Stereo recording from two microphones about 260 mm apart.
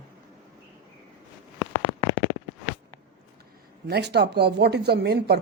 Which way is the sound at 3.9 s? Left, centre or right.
Right.